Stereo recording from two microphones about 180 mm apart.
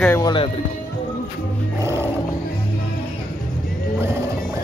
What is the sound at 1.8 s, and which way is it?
Roar, 15° right (ahead or behind).